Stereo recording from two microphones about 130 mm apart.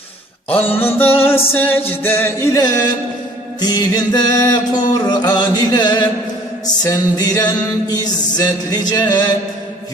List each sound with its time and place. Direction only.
0.5 s music: 15° left (ahead or behind)